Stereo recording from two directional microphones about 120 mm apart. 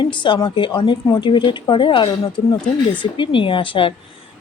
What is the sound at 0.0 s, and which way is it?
A woman's voice, 40° left (ahead or behind).